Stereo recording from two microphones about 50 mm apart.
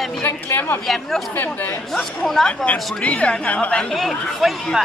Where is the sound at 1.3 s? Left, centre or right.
Left.